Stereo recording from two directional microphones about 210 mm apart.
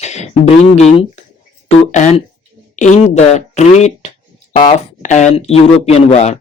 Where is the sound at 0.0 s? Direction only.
30° left (ahead or behind).